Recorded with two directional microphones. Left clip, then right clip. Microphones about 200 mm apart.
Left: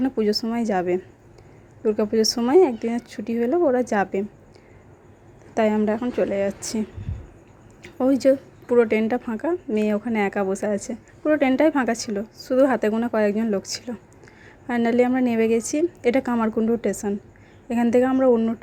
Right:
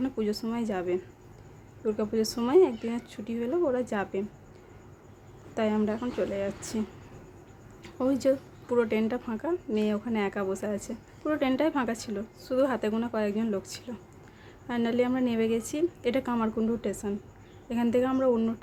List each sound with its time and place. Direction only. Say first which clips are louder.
0.0 s a woman's voice: left 8 dB; 25° left (ahead or behind)
5.5 s a woman's voice: left 8 dB; 25° left (ahead or behind)